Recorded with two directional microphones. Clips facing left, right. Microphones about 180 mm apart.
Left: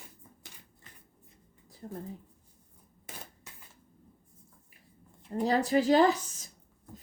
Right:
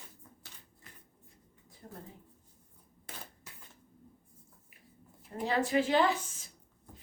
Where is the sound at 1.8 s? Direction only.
35° left (ahead or behind).